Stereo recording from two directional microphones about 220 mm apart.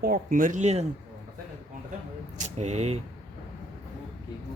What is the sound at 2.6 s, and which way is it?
Speech, 30° right (ahead or behind).